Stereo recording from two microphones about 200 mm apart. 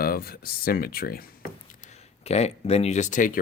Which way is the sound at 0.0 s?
50° left (ahead or behind).